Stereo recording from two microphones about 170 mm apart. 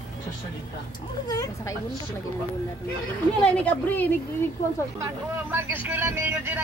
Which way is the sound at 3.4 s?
10° left (ahead or behind).